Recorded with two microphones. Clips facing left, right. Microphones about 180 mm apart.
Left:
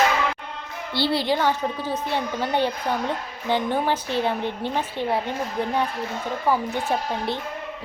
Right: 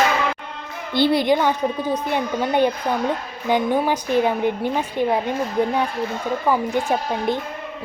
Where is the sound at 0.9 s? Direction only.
15° right (ahead or behind).